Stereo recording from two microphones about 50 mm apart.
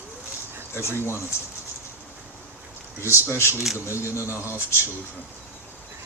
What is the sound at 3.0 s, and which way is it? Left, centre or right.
Speech, left.